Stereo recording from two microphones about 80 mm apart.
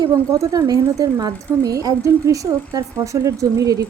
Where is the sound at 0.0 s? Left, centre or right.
Right.